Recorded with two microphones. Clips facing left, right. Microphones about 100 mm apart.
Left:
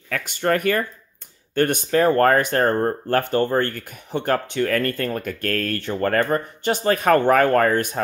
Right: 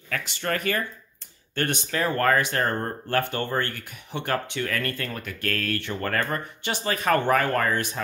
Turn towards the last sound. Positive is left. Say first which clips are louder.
# left 7 dB
turn(degrees=45)  # may be behind; listen again after turning